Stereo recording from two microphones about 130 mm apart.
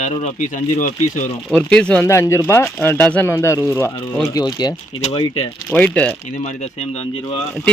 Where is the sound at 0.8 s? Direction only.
75° left (ahead or behind).